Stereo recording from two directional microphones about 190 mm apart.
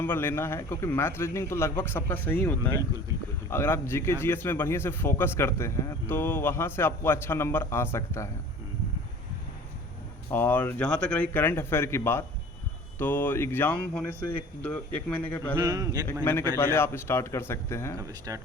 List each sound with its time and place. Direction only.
0.0 s a man's voice: 10° left (ahead or behind)
10.3 s a man's voice: 10° left (ahead or behind)
15.5 s speech: 20° right (ahead or behind)
16.2 s a man's voice: 10° left (ahead or behind)
18.3 s speech: 15° right (ahead or behind)